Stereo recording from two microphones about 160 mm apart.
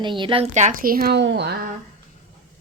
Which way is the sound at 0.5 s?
55° right (ahead or behind).